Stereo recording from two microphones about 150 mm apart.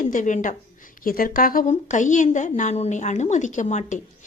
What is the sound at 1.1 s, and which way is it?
A woman's voice, 70° left (ahead or behind).